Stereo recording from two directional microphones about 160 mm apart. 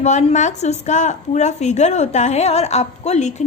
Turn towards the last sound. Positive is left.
turn(degrees=45)  # may be behind; listen again after turning